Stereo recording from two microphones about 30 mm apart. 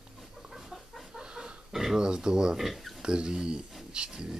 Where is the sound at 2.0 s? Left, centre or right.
Right.